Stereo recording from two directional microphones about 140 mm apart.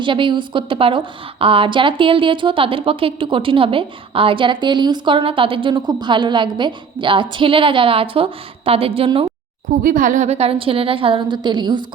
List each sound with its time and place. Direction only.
0.0 s a woman's voice: 35° right (ahead or behind)
9.8 s a woman's voice: 70° right (ahead or behind); by 11.9 s 30° right (ahead or behind)